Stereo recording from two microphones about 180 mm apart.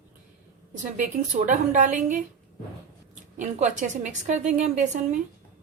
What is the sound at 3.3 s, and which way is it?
A woman's voice, 40° right (ahead or behind).